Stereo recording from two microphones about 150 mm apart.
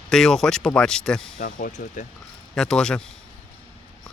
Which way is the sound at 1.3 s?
55° left (ahead or behind).